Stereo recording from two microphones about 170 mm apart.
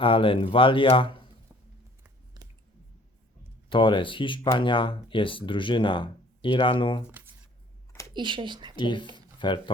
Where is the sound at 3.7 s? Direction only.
30° left (ahead or behind).